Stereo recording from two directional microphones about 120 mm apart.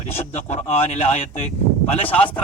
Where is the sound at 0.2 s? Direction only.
65° left (ahead or behind).